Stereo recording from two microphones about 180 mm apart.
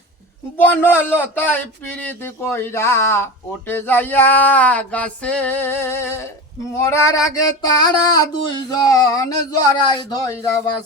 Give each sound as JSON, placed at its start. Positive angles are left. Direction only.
{"t": 0.6, "sound": "a man's voice", "side_deg": 10}